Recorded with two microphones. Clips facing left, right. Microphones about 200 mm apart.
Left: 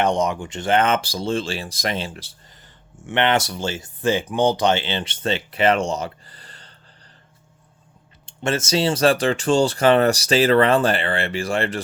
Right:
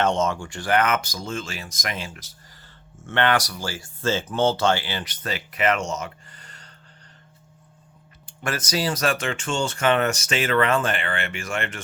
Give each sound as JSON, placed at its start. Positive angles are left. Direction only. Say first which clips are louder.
{"t": 0.0, "sound": "speech", "louder": "left 2 dB", "side_deg": 15}
{"t": 3.1, "sound": "speech", "louder": "left 2 dB", "side_deg": 20}
{"t": 8.3, "sound": "speech", "louder": "left 6 dB", "side_deg": 25}